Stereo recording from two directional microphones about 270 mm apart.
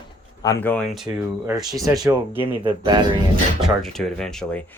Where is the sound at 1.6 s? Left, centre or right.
Centre.